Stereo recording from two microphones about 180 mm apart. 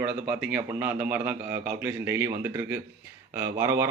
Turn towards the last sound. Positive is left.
turn(degrees=-15)  # may be behind; listen again after turning